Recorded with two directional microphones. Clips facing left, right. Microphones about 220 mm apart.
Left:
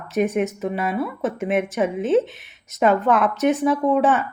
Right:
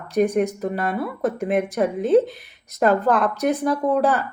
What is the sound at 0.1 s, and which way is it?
A woman's voice, 5° left (ahead or behind).